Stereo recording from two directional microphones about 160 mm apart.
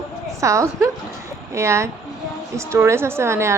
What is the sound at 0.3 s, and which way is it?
A woman's voice, 20° right (ahead or behind).